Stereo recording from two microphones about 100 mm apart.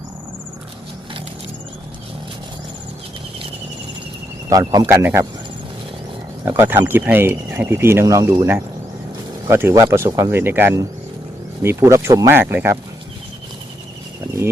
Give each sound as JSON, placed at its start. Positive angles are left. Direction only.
{"t": 4.4, "sound": "speech", "side_deg": -40}
{"t": 4.9, "sound": "speech", "side_deg": -25}
{"t": 6.4, "sound": "speech", "side_deg": -25}
{"t": 8.0, "sound": "speech", "side_deg": -40}
{"t": 9.5, "sound": "speech", "side_deg": -25}
{"t": 10.4, "sound": "speech", "side_deg": -20}